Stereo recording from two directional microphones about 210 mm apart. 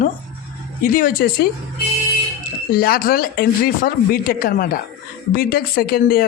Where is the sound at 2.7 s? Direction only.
45° left (ahead or behind).